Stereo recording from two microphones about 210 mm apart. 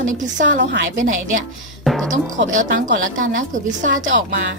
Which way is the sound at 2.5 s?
40° right (ahead or behind).